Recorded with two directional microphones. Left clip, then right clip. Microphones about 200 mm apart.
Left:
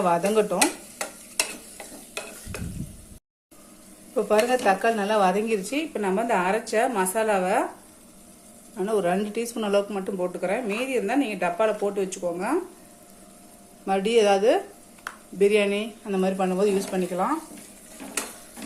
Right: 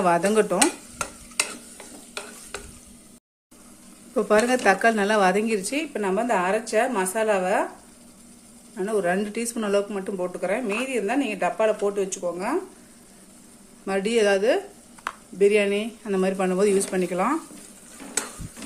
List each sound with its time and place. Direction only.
0.0 s speech: 20° right (ahead or behind)
4.1 s a woman's voice: 25° right (ahead or behind); by 7.7 s centre (ahead or behind)
8.7 s speech: 5° right (ahead or behind)
13.8 s speech: 10° right (ahead or behind)